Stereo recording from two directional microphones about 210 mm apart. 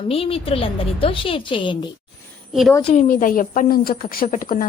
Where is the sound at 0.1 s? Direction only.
25° left (ahead or behind).